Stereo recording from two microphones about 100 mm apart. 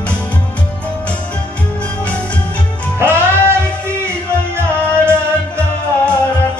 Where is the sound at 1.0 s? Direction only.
10° left (ahead or behind).